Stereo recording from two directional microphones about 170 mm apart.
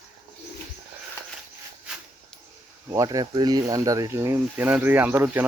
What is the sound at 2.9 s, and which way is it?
Speech, 20° right (ahead or behind).